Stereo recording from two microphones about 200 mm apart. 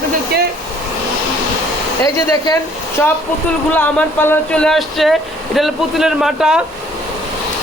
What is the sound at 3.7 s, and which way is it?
Speech, 10° left (ahead or behind).